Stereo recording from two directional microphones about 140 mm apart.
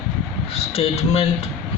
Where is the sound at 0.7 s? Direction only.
45° left (ahead or behind).